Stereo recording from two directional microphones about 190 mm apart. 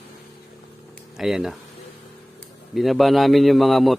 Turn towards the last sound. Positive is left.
turn(degrees=0)  # may be behind; listen again after turning